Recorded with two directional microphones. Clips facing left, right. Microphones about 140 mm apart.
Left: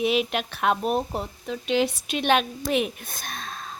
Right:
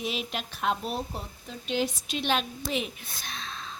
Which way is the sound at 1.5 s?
80° left.